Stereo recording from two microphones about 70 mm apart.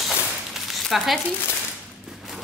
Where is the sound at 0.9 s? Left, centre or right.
Centre.